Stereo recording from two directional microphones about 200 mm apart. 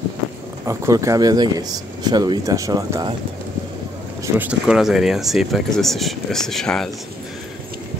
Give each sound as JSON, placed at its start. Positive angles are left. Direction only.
{"t": 0.7, "sound": "speech", "side_deg": -15}
{"t": 4.4, "sound": "speech", "side_deg": -5}